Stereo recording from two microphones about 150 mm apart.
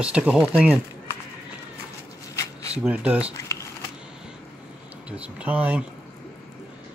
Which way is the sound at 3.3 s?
20° left (ahead or behind).